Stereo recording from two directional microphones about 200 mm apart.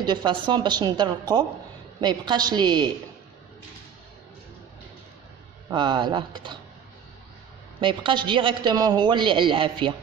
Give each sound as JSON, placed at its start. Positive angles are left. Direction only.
{"t": 0.0, "sound": "a man's voice", "side_deg": -20}
{"t": 5.7, "sound": "a man's voice", "side_deg": -25}
{"t": 7.8, "sound": "a man's voice", "side_deg": -25}